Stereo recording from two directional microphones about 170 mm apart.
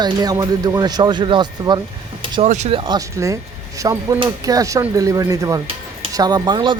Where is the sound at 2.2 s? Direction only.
30° right (ahead or behind).